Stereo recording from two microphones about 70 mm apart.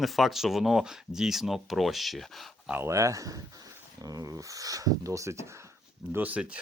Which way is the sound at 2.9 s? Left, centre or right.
Right.